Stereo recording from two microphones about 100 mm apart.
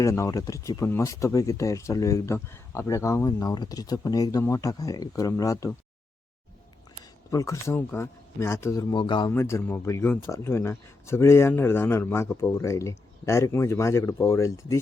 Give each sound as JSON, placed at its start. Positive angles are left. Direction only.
{"t": 0.0, "sound": "speech", "side_deg": 30}
{"t": 7.3, "sound": "speech", "side_deg": 30}
{"t": 9.0, "sound": "speech", "side_deg": 50}
{"t": 9.3, "sound": "speech", "side_deg": 25}